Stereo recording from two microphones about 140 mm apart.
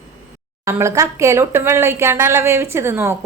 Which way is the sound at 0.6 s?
20° right (ahead or behind).